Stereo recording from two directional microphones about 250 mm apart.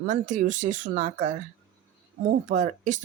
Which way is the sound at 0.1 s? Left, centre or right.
Right.